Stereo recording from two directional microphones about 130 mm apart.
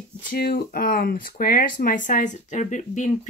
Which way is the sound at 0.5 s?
90° left.